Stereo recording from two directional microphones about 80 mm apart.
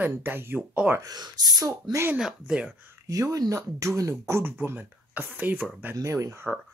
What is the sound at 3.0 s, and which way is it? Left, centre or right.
Speech, right.